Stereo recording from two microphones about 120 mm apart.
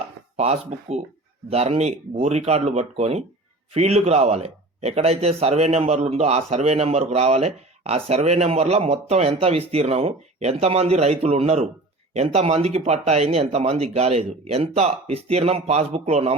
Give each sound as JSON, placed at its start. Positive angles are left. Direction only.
{"t": 0.3, "sound": "speech", "side_deg": -65}